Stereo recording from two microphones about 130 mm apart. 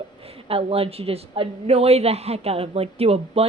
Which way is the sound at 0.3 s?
45° right (ahead or behind).